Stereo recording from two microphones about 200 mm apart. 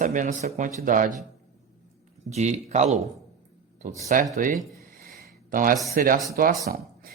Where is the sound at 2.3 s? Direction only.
35° right (ahead or behind).